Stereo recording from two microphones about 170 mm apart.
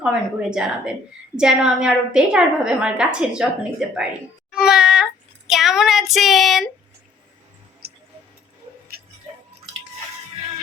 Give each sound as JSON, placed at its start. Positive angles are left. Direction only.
{"t": 0.0, "sound": "a woman's voice", "side_deg": -5}
{"t": 4.5, "sound": "child singing", "side_deg": 0}
{"t": 7.8, "sound": "a sound", "side_deg": -65}